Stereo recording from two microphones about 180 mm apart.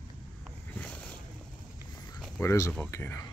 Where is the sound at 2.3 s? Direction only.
15° left (ahead or behind).